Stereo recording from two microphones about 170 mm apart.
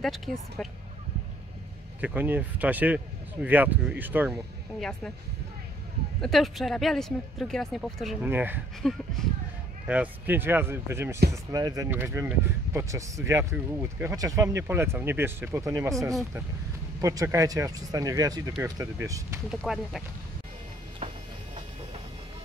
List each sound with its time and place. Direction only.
0.0 s speech: centre (ahead or behind)
2.0 s speech: 10° right (ahead or behind)
4.7 s speech: 5° left (ahead or behind)
6.2 s speech: centre (ahead or behind)
8.3 s speech: 10° right (ahead or behind)
8.8 s speech: 5° left (ahead or behind)
9.8 s speech: 10° right (ahead or behind)
17.0 s speech: 20° right (ahead or behind)
19.5 s speech: centre (ahead or behind)